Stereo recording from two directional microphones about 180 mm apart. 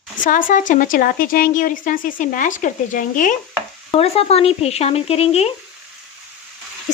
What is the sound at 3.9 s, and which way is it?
Speech, 35° left (ahead or behind).